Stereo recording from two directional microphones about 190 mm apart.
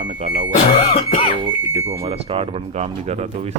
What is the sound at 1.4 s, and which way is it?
Speech, 30° right (ahead or behind).